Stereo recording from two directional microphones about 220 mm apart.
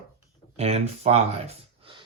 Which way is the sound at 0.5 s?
30° right (ahead or behind).